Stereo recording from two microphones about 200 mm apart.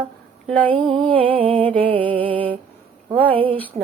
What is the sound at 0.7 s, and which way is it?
Music, 25° right (ahead or behind).